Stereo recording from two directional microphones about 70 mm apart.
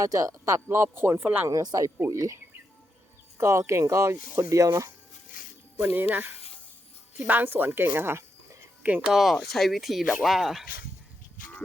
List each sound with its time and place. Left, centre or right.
0.0 s speech: right
1.2 s speech: right
1.5 s speech: right
2.0 s speech: right
5.8 s speech: right
7.3 s speech: right
8.8 s speech: right
9.0 s speech: centre